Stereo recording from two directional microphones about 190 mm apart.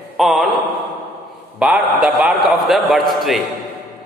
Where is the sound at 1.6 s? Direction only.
5° right (ahead or behind).